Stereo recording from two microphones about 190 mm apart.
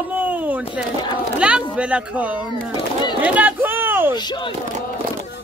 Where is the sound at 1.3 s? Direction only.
5° right (ahead or behind).